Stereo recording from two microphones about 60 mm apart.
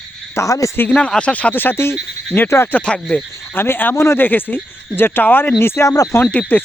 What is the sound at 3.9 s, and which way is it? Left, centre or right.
Speech, left.